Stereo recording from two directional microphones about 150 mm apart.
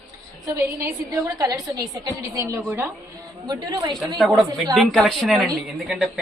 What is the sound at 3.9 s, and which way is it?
Speech, centre (ahead or behind).